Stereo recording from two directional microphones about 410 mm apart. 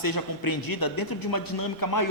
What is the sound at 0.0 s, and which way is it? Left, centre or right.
A man's voice, left.